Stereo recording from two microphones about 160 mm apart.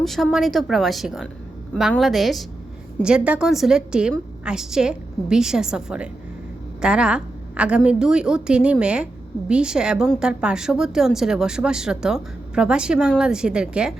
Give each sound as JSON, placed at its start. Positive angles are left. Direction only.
{"t": 0.0, "sound": "a woman's voice", "side_deg": 0}